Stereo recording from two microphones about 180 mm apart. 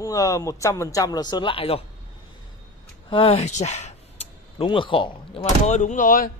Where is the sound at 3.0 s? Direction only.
30° left (ahead or behind).